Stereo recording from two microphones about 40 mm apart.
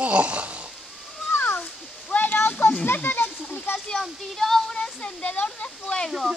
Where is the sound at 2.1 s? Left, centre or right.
Left.